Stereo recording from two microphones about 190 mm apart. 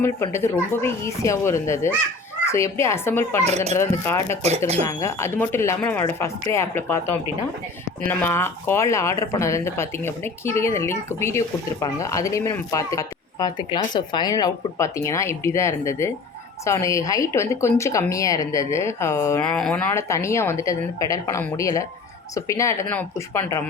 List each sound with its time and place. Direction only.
0.0 s speech: 15° left (ahead or behind)
3.4 s speech: 35° right (ahead or behind)
3.8 s speech: 15° left (ahead or behind)
4.4 s speech: 35° right (ahead or behind)
4.9 s speech: 15° left (ahead or behind)
19.5 s speech: 5° left (ahead or behind)
19.9 s speech: 15° left (ahead or behind)